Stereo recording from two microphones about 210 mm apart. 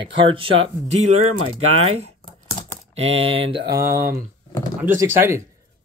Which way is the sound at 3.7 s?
15° right (ahead or behind).